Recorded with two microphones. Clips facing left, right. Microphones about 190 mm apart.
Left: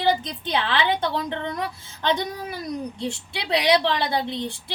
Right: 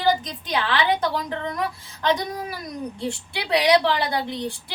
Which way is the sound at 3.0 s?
25° left (ahead or behind).